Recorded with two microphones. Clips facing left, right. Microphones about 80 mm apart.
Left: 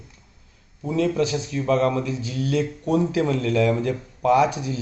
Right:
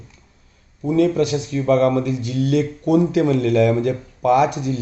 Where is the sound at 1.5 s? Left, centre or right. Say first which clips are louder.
Right 4 dB; right.